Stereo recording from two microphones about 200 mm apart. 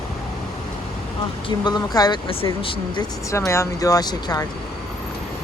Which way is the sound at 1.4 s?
20° left (ahead or behind).